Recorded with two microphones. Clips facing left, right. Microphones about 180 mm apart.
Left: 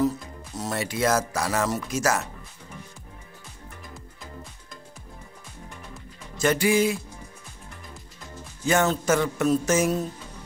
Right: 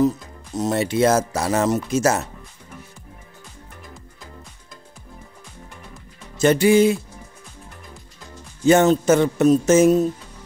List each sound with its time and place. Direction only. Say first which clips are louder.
0.6 s speech: right 8 dB; 20° right (ahead or behind)
6.4 s speech: right 7 dB; 25° right (ahead or behind)
8.6 s speech: right 8 dB; 25° right (ahead or behind)